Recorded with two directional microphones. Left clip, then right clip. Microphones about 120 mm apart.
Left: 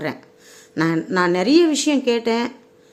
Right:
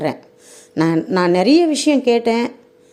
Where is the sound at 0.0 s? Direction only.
40° right (ahead or behind).